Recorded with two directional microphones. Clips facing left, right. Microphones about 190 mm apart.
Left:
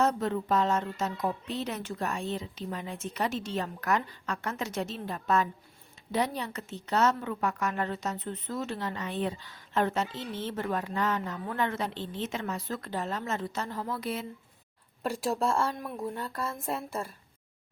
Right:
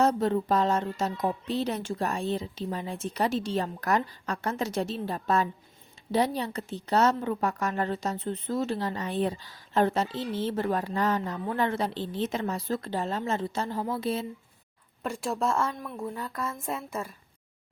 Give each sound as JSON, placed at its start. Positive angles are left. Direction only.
{"t": 0.0, "sound": "a woman's voice", "side_deg": -35}
{"t": 15.0, "sound": "speech", "side_deg": 35}
{"t": 15.8, "sound": "speech", "side_deg": 10}
{"t": 16.3, "sound": "speech", "side_deg": 30}